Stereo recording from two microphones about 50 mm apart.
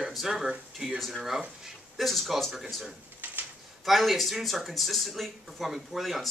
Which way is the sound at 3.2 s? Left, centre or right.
Right.